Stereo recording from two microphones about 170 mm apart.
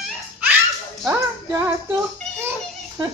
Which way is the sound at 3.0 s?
25° right (ahead or behind).